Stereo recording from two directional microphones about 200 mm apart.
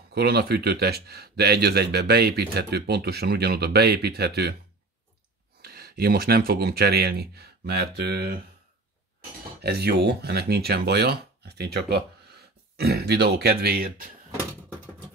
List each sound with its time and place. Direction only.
0.1 s speech: 55° right (ahead or behind)
5.6 s speech: 50° right (ahead or behind)
9.6 s speech: 55° right (ahead or behind)